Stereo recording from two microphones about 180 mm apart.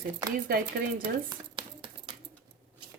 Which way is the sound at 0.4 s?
55° right (ahead or behind).